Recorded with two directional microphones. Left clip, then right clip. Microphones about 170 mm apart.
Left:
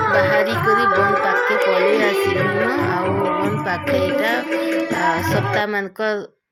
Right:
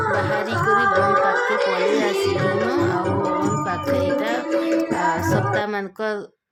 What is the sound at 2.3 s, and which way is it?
Music, 20° left (ahead or behind).